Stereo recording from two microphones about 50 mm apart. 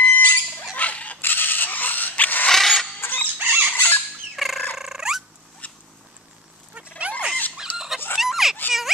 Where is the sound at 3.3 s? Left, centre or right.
Right.